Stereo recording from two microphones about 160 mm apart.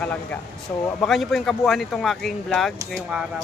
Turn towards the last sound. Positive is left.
turn(degrees=-5)  # may be behind; listen again after turning